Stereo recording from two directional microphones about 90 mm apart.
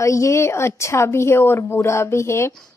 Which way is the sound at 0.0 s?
35° left (ahead or behind).